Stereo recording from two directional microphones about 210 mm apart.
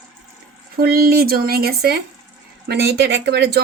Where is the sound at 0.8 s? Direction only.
45° right (ahead or behind).